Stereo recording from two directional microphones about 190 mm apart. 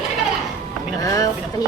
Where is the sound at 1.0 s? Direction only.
20° left (ahead or behind).